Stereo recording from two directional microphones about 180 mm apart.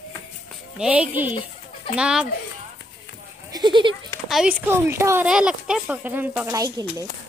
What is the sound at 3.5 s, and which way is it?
Goat, 25° right (ahead or behind).